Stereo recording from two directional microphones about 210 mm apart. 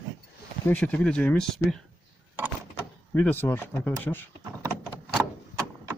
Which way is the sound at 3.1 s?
10° left (ahead or behind).